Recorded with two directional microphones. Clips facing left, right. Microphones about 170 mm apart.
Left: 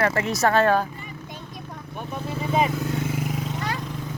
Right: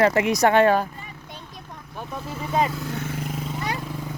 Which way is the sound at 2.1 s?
15° left (ahead or behind).